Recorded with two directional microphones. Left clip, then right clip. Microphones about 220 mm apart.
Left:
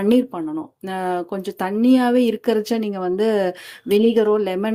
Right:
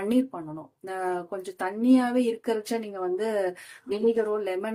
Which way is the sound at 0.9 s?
45° left (ahead or behind).